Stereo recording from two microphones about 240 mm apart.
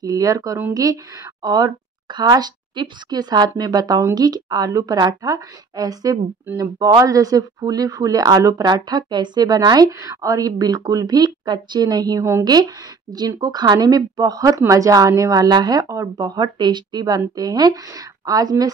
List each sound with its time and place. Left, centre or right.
0.0 s a woman's voice: centre